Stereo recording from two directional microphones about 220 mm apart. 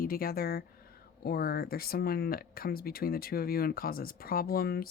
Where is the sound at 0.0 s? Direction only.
40° left (ahead or behind).